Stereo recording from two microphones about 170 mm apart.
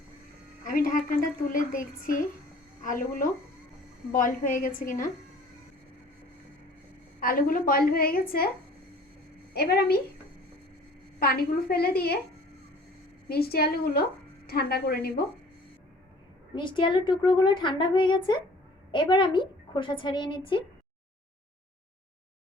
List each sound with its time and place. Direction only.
0.6 s a woman's voice: 55° left (ahead or behind)
7.2 s a woman's voice: 55° left (ahead or behind)
9.5 s a woman's voice: 65° left (ahead or behind)
11.2 s a woman's voice: 65° left (ahead or behind)
13.2 s a woman's voice: 65° left (ahead or behind)
16.6 s a woman's voice: 30° left (ahead or behind)